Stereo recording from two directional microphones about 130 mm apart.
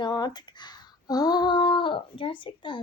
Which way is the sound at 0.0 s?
30° left (ahead or behind).